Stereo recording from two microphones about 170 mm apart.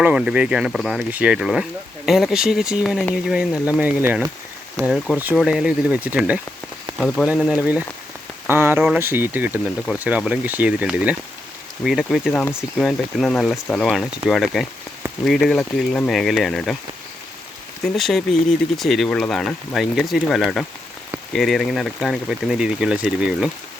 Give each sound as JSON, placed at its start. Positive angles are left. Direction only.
{"t": 0.0, "sound": "speech", "side_deg": -5}
{"t": 17.8, "sound": "speech", "side_deg": 0}